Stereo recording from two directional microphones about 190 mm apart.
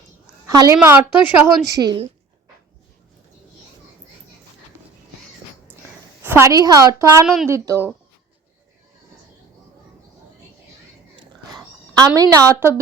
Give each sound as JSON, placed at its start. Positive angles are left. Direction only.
{"t": 0.4, "sound": "a woman's voice", "side_deg": -20}
{"t": 6.2, "sound": "a woman's voice", "side_deg": -15}
{"t": 11.5, "sound": "speech", "side_deg": -20}